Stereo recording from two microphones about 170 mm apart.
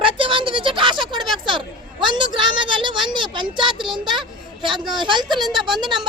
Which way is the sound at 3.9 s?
25° right (ahead or behind).